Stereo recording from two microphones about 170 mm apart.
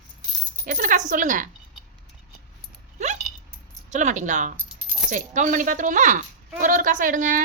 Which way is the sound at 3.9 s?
45° right (ahead or behind).